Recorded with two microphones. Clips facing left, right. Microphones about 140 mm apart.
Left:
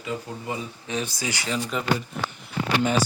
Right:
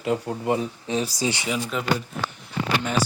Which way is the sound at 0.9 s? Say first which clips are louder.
Right 4 dB; 30° right (ahead or behind).